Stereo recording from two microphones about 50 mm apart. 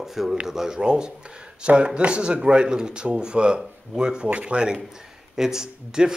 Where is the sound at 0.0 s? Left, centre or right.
Centre.